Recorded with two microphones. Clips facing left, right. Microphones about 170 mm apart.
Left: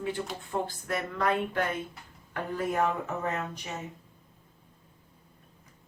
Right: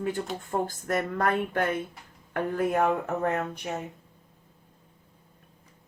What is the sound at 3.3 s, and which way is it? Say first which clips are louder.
Speech: right 5 dB; 55° right (ahead or behind).